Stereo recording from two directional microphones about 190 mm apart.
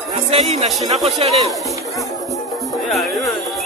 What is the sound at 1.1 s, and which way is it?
Speech, 35° right (ahead or behind).